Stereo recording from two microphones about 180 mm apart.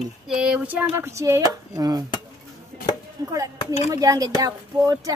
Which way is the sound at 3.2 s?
20° right (ahead or behind).